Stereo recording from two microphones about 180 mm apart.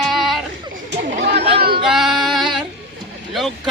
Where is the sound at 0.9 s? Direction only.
70° right (ahead or behind).